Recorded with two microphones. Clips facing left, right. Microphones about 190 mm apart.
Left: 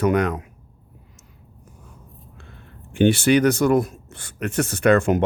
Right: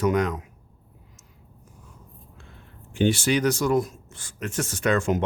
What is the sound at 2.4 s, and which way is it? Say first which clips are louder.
Speech: left 4 dB; 60° left (ahead or behind).